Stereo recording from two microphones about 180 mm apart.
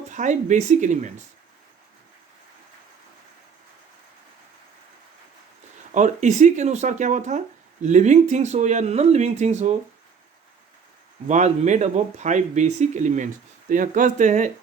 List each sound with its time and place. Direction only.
0.1 s speech: 45° right (ahead or behind)
5.9 s speech: 40° right (ahead or behind)
11.3 s speech: 40° right (ahead or behind)